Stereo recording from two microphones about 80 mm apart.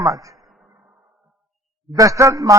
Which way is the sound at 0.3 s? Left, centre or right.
Centre.